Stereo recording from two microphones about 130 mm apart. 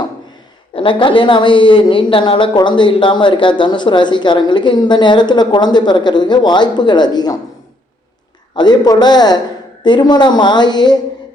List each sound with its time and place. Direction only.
0.7 s speech: 40° left (ahead or behind)
8.5 s speech: 35° left (ahead or behind)